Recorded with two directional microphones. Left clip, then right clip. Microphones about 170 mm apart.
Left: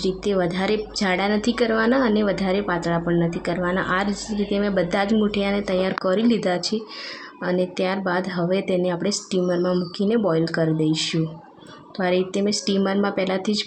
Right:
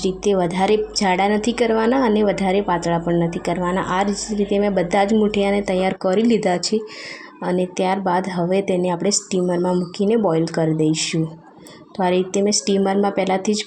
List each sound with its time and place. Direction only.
0.0 s a woman's voice: 15° right (ahead or behind)